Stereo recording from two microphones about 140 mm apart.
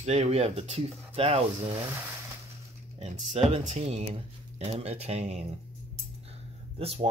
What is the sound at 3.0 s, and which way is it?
Speech, 50° right (ahead or behind).